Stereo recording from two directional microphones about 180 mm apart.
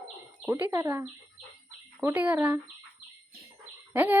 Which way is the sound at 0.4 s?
10° right (ahead or behind).